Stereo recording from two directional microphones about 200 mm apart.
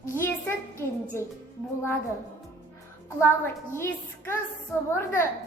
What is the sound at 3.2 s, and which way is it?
A child's voice, 10° left (ahead or behind).